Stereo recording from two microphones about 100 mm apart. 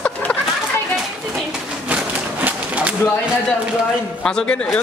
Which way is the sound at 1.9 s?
15° right (ahead or behind).